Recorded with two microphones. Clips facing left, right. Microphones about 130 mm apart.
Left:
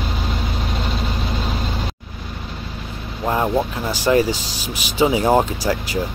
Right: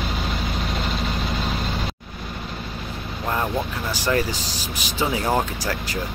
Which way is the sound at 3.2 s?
20° left (ahead or behind).